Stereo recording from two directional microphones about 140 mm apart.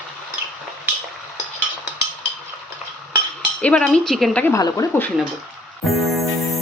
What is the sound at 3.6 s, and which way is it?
Speech, 5° left (ahead or behind).